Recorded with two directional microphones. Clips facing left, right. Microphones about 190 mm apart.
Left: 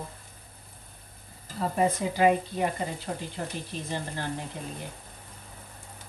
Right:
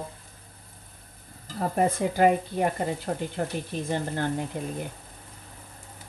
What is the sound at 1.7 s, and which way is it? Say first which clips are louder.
Speech: right 2 dB; 50° right (ahead or behind).